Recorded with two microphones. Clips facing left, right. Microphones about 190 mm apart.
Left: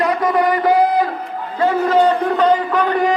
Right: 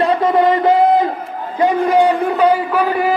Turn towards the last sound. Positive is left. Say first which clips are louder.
# even
turn(degrees=-5)  # may be behind; listen again after turning